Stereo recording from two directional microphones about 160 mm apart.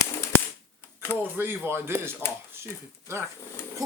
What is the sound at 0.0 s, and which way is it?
Typewriter, 15° left (ahead or behind).